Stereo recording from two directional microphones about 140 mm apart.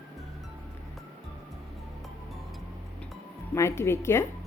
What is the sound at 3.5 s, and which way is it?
Speech, 20° left (ahead or behind).